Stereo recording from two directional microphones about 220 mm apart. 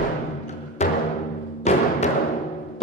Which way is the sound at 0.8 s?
30° left (ahead or behind).